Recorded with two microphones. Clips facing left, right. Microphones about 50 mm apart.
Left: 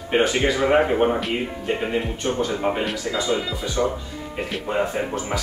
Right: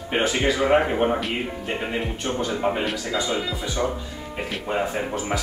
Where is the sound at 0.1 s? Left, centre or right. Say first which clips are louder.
Left 2 dB; centre.